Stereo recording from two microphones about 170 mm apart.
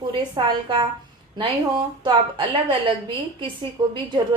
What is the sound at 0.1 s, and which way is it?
Speech, 30° right (ahead or behind).